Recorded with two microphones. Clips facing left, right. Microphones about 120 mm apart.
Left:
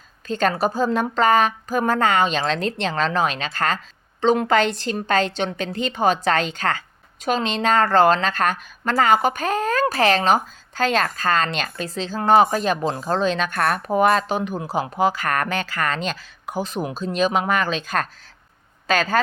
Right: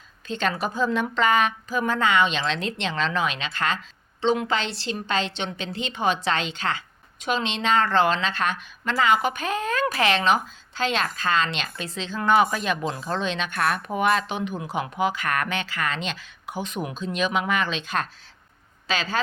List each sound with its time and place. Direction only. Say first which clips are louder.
0.3 s a woman's voice: left 6 dB; 45° left (ahead or behind)